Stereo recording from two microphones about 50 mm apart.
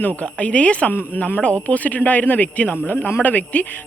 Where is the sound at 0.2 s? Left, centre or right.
Left.